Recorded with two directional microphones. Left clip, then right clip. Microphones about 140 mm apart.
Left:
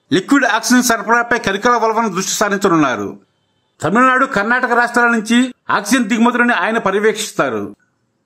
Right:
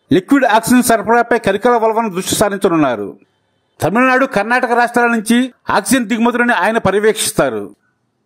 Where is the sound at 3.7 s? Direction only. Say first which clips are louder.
Even; 35° right (ahead or behind).